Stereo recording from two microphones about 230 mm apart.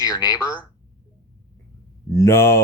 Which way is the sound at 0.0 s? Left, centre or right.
Centre.